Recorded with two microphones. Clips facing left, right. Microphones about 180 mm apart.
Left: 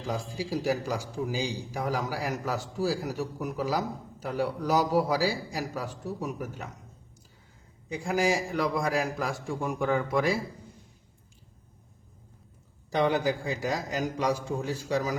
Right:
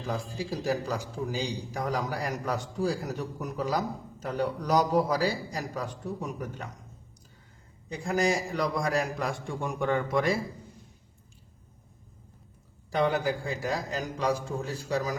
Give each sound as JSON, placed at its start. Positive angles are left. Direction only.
{"t": 0.1, "sound": "a man's voice", "side_deg": 10}
{"t": 7.9, "sound": "a man's voice", "side_deg": 10}
{"t": 12.9, "sound": "a man's voice", "side_deg": 20}